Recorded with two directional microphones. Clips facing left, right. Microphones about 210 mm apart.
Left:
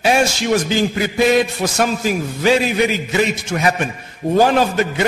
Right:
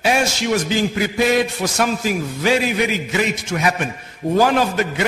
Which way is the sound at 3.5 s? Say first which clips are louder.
Left 2 dB; 35° left (ahead or behind).